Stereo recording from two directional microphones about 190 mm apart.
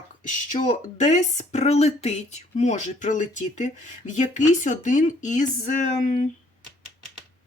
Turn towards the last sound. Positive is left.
turn(degrees=40)  # may be behind; listen again after turning